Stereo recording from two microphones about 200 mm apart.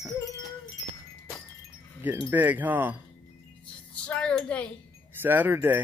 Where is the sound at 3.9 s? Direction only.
5° left (ahead or behind).